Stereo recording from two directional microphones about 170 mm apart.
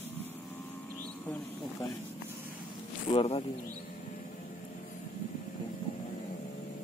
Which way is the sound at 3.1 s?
35° left (ahead or behind).